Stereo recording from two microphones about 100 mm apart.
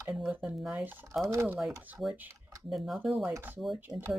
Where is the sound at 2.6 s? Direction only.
Centre (ahead or behind).